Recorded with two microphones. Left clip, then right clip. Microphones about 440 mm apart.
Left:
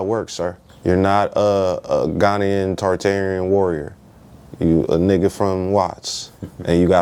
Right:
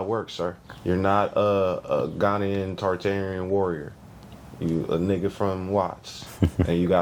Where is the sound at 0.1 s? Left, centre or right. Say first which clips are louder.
Left 6 dB; left.